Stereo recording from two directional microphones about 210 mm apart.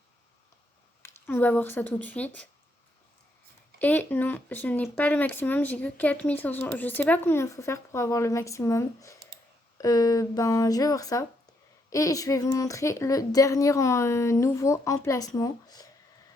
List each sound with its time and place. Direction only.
1.0 s speech: 10° left (ahead or behind)
3.8 s speech: 10° left (ahead or behind)